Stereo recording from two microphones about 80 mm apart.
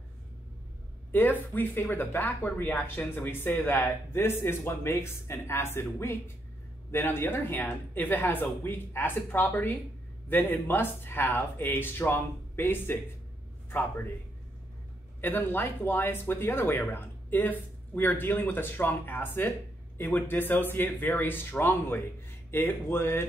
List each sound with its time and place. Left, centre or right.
1.1 s a man's voice: left
15.1 s speech: left